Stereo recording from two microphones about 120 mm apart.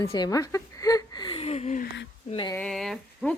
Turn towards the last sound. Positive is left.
turn(degrees=5)  # may be behind; listen again after turning